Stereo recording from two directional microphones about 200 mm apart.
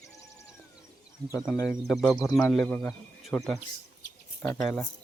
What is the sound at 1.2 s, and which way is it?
Speech, 20° right (ahead or behind).